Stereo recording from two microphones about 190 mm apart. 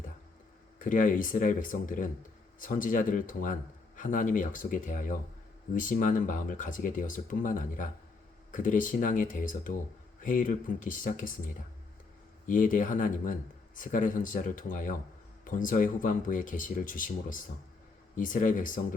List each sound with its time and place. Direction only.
0.8 s speech: 45° left (ahead or behind)